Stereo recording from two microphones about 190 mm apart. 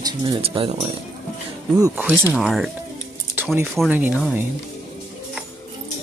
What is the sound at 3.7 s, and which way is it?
Speech, 5° right (ahead or behind).